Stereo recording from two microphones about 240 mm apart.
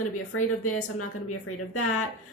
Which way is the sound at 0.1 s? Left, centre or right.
Left.